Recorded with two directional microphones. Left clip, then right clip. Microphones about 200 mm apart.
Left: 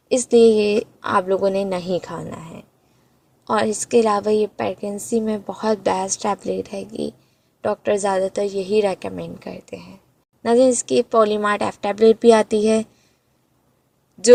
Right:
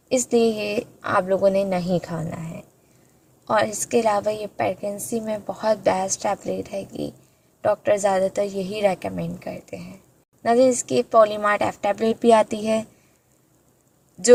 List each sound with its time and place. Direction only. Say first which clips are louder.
0.1 s a woman's voice: left 6 dB; 35° left (ahead or behind)